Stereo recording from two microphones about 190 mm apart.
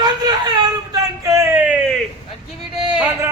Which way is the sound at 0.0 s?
20° right (ahead or behind).